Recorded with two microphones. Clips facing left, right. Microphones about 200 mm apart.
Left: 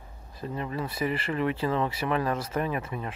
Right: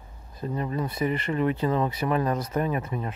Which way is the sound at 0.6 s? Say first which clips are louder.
Right 3 dB; 30° right (ahead or behind).